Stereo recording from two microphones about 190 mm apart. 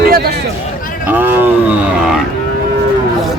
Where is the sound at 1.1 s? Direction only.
10° right (ahead or behind).